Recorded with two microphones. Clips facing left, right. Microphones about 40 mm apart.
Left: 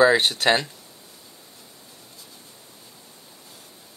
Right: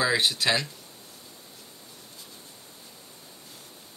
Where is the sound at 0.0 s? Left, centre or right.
Left.